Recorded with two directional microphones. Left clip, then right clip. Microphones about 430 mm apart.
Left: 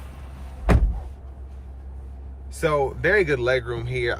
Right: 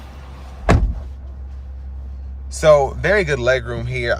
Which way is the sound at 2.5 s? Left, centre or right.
Centre.